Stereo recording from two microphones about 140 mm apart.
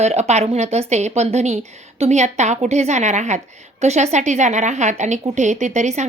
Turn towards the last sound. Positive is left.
turn(degrees=-55)  # may be behind; listen again after turning